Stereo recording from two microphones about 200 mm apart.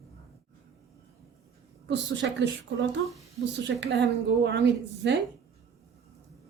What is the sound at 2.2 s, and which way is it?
Speech, 65° right (ahead or behind).